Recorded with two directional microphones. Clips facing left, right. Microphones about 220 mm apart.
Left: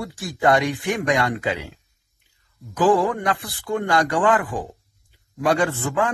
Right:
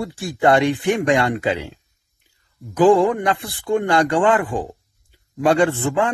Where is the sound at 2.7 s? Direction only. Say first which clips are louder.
Right 5 dB; 25° right (ahead or behind).